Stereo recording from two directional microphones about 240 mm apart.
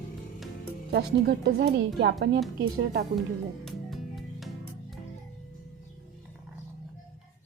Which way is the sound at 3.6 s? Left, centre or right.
Centre.